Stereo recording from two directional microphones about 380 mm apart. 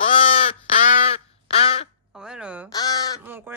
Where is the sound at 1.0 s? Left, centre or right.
Centre.